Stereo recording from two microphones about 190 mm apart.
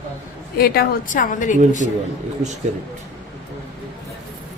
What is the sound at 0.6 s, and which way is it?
A woman's voice, 50° left (ahead or behind).